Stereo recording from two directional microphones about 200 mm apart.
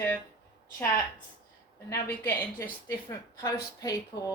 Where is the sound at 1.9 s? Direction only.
10° left (ahead or behind).